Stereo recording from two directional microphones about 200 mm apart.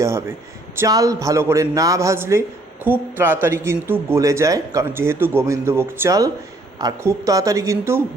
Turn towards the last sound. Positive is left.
turn(degrees=-15)  # may be behind; listen again after turning